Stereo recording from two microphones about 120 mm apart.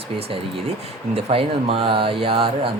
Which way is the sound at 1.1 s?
50° right (ahead or behind).